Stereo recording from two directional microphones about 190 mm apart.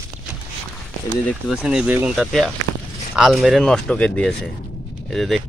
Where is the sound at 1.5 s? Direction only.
5° right (ahead or behind).